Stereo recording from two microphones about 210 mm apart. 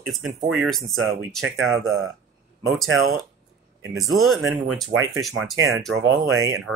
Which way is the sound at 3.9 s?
Centre (ahead or behind).